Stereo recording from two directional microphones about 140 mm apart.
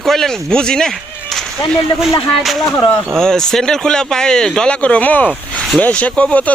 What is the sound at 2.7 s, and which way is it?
Speech, 20° left (ahead or behind).